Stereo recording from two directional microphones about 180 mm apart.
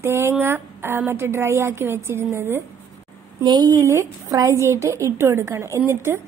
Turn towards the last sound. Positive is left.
turn(degrees=-15)  # may be behind; listen again after turning